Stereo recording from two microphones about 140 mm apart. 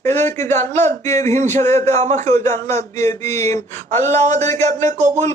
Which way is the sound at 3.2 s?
20° left (ahead or behind).